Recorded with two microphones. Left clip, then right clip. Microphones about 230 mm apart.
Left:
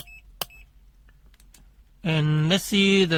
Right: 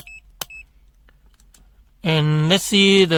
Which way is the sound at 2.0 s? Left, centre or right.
Right.